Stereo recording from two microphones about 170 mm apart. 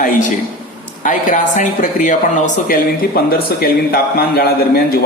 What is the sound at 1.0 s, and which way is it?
A man's voice, 50° left (ahead or behind).